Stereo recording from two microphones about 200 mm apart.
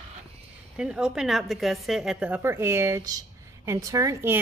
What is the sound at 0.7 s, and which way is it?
A woman's voice, 5° right (ahead or behind).